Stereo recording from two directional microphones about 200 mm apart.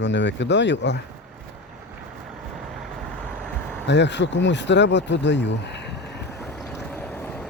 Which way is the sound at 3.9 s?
60° left (ahead or behind).